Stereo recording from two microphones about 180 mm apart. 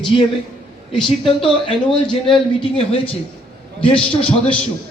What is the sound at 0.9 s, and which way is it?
A man's voice, 30° left (ahead or behind).